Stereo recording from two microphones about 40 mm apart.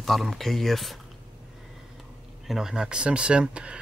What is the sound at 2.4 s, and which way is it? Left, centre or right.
Speech, centre.